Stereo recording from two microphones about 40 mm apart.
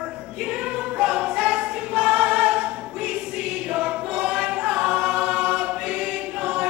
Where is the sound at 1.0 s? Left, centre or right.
Right.